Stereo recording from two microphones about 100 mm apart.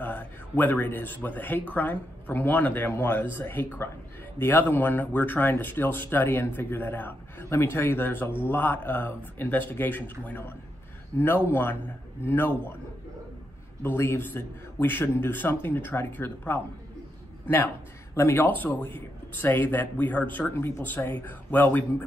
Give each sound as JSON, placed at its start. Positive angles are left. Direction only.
{"t": 0.0, "sound": "a man's voice", "side_deg": 15}
{"t": 13.8, "sound": "speech", "side_deg": 25}
{"t": 18.1, "sound": "speech", "side_deg": 25}